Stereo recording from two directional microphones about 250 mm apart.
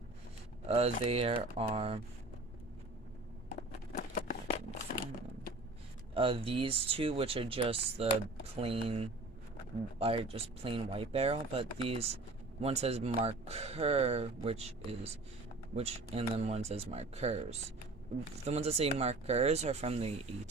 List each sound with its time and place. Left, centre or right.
0.7 s speech: right
3.9 s a sound: left
6.1 s speech: right